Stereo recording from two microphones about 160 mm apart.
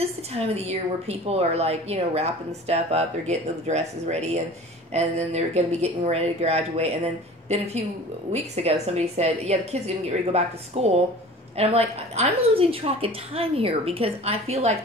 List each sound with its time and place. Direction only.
0.0 s a woman's voice: 40° right (ahead or behind)